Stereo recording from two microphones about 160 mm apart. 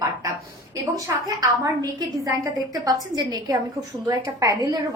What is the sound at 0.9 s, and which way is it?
A woman's voice, 20° right (ahead or behind).